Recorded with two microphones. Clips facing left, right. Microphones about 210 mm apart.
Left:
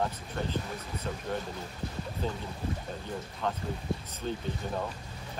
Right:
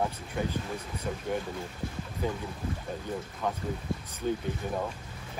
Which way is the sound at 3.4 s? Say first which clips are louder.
Even; 10° right (ahead or behind).